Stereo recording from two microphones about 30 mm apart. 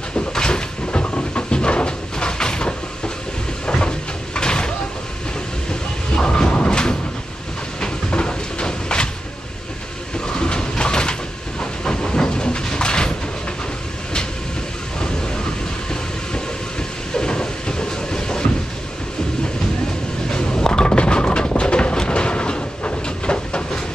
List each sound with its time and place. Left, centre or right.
0.3 s cupboard open or close: left
0.9 s a sound: left
3.6 s cupboard open or close: left
4.4 s vehicle: left
5.7 s a sound: left
6.7 s vehicle: left
7.8 s train: left
10.2 s a sound: left
11.8 s train: left
17.1 s train: left
20.2 s a sound: left
21.9 s train: left